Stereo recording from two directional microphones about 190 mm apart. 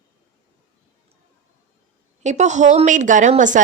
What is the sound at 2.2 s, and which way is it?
A woman's voice, 40° right (ahead or behind).